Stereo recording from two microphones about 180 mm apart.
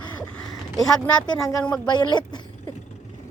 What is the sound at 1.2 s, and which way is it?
Speech, 20° left (ahead or behind).